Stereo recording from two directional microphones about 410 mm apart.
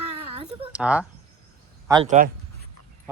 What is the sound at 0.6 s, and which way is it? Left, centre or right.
Cricket, centre.